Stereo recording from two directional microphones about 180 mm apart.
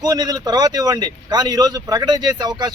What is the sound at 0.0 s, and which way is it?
Speech, 20° right (ahead or behind).